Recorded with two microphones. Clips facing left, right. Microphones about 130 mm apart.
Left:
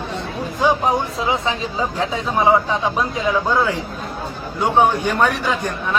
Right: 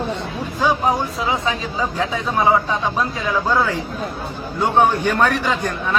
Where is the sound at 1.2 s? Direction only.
25° left (ahead or behind).